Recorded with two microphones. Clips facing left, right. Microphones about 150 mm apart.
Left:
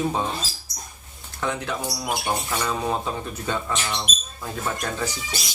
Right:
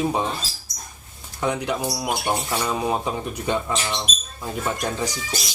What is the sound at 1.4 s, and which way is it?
Speech, 15° right (ahead or behind).